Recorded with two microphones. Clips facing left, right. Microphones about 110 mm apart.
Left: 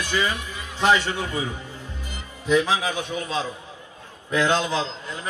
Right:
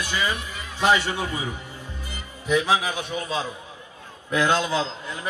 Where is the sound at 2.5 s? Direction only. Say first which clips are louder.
Left 1 dB; 15° right (ahead or behind).